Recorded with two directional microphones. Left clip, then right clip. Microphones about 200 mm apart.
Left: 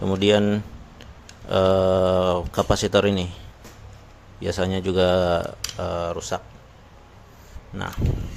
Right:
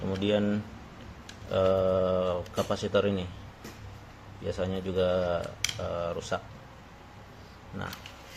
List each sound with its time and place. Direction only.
0.0 s speech: 35° left (ahead or behind)
4.4 s speech: 30° left (ahead or behind)